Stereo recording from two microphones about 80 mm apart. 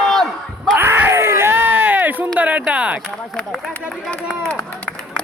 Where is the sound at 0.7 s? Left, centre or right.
Right; by 3.1 s centre.